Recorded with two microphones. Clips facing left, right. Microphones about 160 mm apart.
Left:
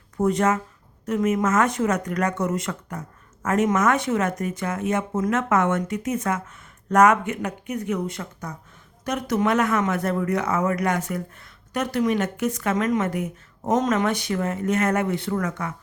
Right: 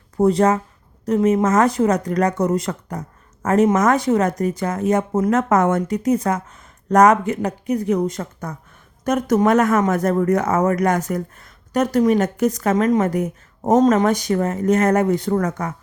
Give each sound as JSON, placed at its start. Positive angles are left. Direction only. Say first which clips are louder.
{"t": 0.2, "sound": "speech", "louder": "right 5 dB", "side_deg": -35}